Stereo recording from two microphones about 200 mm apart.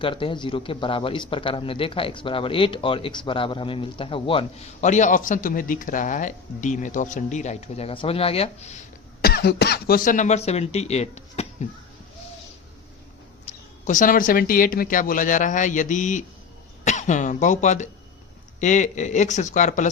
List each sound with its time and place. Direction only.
0.0 s speech: 25° left (ahead or behind)
9.2 s speech: 50° left (ahead or behind); by 11.7 s 35° left (ahead or behind)
13.8 s speech: 40° left (ahead or behind)